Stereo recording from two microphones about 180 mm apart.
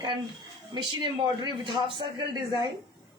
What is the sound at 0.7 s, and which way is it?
Speech, 25° right (ahead or behind).